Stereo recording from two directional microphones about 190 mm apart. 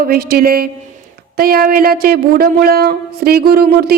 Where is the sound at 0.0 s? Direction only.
55° right (ahead or behind).